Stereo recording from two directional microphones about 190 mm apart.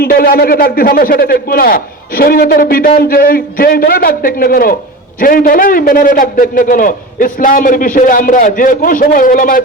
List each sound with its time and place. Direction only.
0.0 s speech: 50° left (ahead or behind)